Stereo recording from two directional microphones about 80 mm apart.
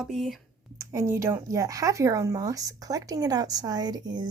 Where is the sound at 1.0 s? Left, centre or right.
Right.